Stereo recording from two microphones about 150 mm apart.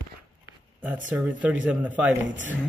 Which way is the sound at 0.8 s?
10° right (ahead or behind).